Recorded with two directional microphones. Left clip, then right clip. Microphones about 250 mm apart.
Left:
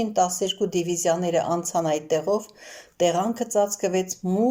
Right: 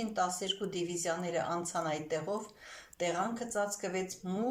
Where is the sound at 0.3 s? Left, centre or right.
Left.